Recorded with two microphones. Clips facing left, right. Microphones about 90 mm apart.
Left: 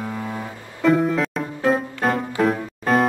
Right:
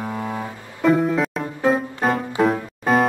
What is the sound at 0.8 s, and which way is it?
Music, centre (ahead or behind).